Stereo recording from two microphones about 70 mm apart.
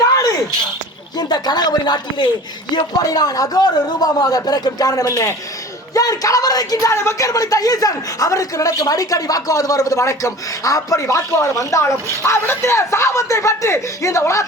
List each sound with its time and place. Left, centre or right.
0.1 s a sound: left
1.1 s a woman's voice: left
6.9 s a woman's voice: left
11.0 s speech: left